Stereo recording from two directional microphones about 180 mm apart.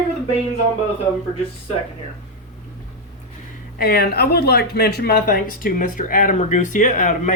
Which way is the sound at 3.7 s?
55° left (ahead or behind).